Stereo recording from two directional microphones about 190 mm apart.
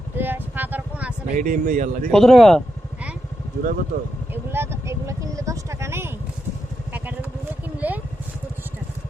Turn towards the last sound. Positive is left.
turn(degrees=-10)  # may be behind; listen again after turning